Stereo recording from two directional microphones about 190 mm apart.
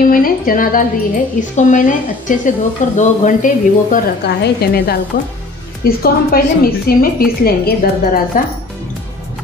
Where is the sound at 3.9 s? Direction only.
60° left (ahead or behind).